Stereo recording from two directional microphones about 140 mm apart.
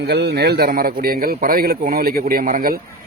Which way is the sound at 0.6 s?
90° right.